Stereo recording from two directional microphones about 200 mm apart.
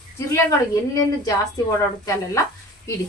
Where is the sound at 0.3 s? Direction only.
15° left (ahead or behind).